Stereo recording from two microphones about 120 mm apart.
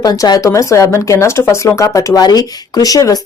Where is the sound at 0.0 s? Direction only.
35° left (ahead or behind).